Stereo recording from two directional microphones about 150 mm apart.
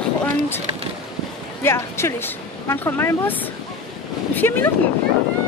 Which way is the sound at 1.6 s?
15° left (ahead or behind).